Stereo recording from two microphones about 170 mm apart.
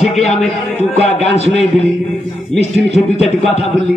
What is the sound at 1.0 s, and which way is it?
Speech, 40° left (ahead or behind).